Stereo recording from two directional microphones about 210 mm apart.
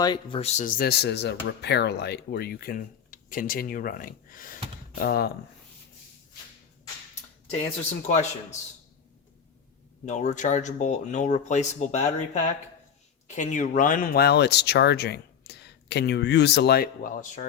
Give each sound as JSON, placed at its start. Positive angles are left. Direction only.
{"t": 0.0, "sound": "speech", "side_deg": 20}
{"t": 7.6, "sound": "speech", "side_deg": 35}
{"t": 10.1, "sound": "speech", "side_deg": 35}